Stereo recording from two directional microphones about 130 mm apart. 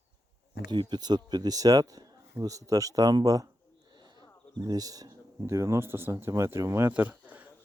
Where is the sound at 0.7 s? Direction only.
35° right (ahead or behind).